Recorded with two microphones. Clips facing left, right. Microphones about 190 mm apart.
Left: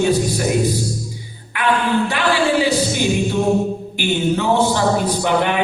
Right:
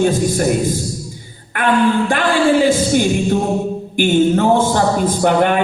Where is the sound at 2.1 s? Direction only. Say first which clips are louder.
Right 3 dB; 50° right (ahead or behind).